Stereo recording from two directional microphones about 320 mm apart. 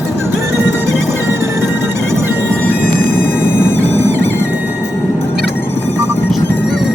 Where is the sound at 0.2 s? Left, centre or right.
Centre.